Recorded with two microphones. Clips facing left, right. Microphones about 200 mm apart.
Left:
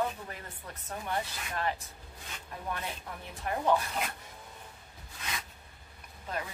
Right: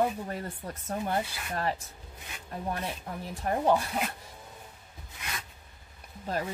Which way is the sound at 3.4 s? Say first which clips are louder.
Right 3 dB; 35° right (ahead or behind).